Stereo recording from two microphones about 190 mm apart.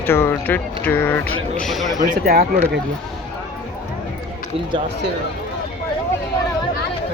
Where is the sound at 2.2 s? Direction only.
50° right (ahead or behind).